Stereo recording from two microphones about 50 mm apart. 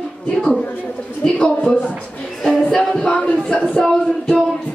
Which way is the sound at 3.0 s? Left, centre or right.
Left.